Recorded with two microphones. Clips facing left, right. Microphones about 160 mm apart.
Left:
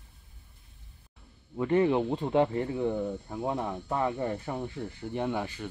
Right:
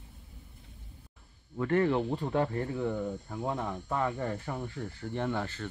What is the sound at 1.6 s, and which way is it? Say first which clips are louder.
Speech: left 2 dB; 15° left (ahead or behind).